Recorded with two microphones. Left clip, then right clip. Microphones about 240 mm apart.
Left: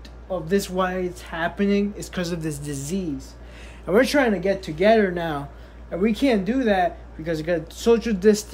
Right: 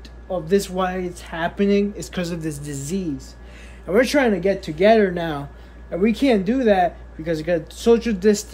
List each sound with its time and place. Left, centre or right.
0.3 s speech: centre